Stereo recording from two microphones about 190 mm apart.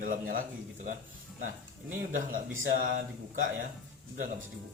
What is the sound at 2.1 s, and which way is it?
Speech, 45° right (ahead or behind).